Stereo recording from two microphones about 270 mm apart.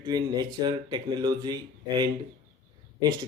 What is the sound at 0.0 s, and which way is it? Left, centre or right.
Speech, centre.